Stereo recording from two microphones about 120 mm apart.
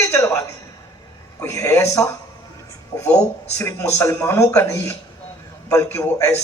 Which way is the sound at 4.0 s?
20° left (ahead or behind).